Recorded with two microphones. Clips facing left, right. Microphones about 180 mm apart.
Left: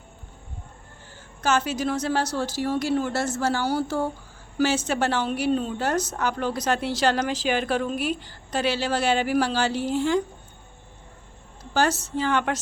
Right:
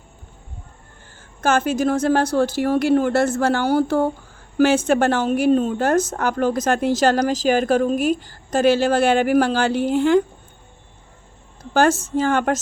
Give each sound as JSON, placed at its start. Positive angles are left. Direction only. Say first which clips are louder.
{"t": 1.4, "sound": "a woman's voice", "louder": "right 5 dB", "side_deg": -50}
{"t": 11.7, "sound": "a woman's voice", "louder": "right 6 dB", "side_deg": -50}